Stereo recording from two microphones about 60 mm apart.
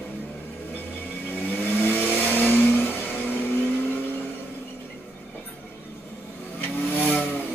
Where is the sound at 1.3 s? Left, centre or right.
Left.